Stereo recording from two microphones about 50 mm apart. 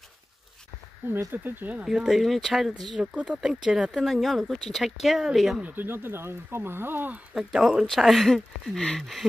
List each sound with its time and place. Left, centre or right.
1.1 s speech: right
1.9 s speech: centre
3.4 s speech: centre
5.6 s speech: right
7.3 s speech: centre
7.8 s speech: centre